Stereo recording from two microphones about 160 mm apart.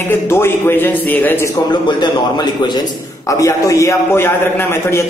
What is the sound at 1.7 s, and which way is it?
A man's voice, 25° left (ahead or behind).